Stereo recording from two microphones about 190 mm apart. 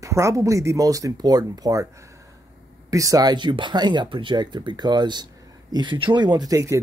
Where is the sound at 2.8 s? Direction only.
20° right (ahead or behind).